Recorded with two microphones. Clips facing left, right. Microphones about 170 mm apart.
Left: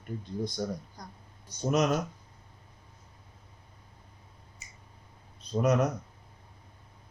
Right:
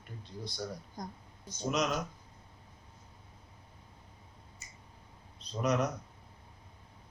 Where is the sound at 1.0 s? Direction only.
20° right (ahead or behind).